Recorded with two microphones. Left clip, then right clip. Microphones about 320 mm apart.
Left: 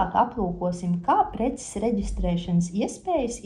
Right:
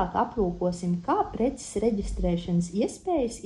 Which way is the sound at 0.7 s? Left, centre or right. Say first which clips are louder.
Left 4 dB; left.